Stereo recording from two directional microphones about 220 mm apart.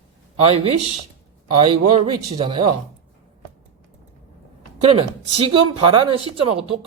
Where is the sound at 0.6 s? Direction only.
25° right (ahead or behind).